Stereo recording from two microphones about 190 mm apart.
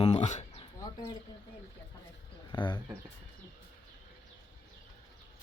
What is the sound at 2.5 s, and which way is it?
Speech, 25° left (ahead or behind).